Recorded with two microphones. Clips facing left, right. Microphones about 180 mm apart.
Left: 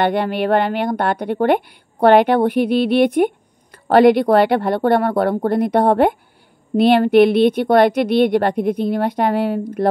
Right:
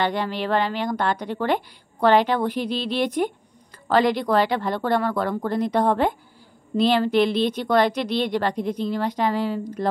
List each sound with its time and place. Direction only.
0.0 s a woman's voice: 55° left (ahead or behind)